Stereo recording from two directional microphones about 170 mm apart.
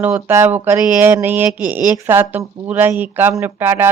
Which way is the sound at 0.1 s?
15° right (ahead or behind).